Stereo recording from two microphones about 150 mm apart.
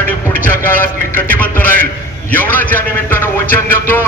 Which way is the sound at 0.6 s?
15° left (ahead or behind).